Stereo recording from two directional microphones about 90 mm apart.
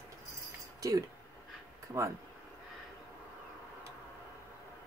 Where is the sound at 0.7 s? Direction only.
40° right (ahead or behind).